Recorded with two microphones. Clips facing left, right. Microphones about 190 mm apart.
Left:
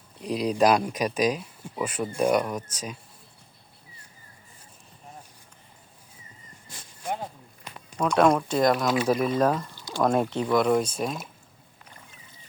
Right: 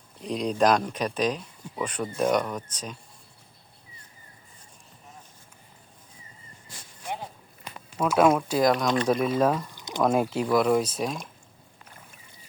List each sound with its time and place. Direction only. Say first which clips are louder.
0.2 s speech: left 1 dB; 5° left (ahead or behind)
7.9 s speech: even; 5° right (ahead or behind)
9.7 s a sound: even; 20° right (ahead or behind)
10.0 s speech: even; 5° right (ahead or behind)